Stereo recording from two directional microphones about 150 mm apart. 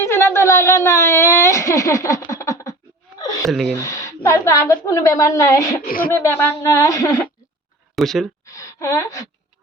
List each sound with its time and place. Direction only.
0.0 s a sound: 20° left (ahead or behind)
3.5 s speech: centre (ahead or behind)
3.8 s a woman's voice: 20° left (ahead or behind)
7.9 s speech: centre (ahead or behind)
8.4 s gasp: 20° left (ahead or behind)